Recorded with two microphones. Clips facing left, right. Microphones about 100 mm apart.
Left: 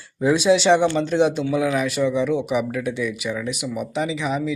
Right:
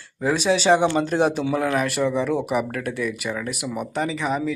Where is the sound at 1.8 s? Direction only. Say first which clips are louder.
Left 1 dB; centre (ahead or behind).